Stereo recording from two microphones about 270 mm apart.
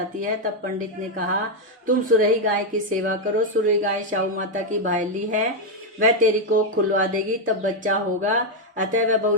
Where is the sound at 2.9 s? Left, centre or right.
Right.